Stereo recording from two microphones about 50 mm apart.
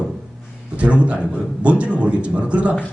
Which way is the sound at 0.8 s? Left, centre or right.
Right.